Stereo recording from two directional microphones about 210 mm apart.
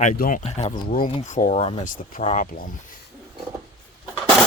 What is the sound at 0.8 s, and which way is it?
Speech, 40° left (ahead or behind).